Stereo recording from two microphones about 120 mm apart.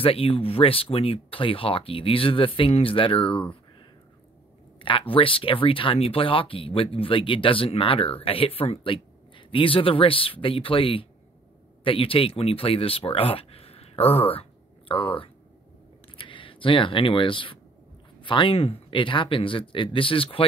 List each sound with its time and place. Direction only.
0.0 s speech: 50° left (ahead or behind)
4.7 s speech: 45° left (ahead or behind)